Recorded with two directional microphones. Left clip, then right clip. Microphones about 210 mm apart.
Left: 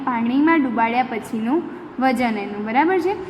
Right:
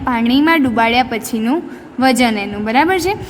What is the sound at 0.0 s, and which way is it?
A woman's voice, 50° right (ahead or behind).